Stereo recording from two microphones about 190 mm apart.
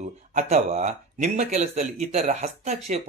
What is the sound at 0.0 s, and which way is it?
Speech, 40° right (ahead or behind).